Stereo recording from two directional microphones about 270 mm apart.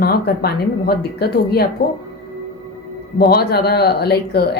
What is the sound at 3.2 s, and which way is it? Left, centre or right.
A woman's voice, left.